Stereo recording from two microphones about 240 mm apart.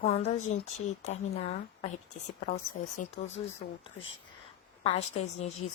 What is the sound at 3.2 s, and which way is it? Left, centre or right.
Speech, left.